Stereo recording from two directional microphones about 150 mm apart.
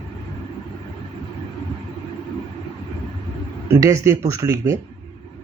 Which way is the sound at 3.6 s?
20° right (ahead or behind).